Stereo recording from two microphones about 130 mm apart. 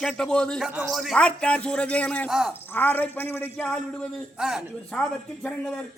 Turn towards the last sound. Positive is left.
turn(degrees=5)  # may be behind; listen again after turning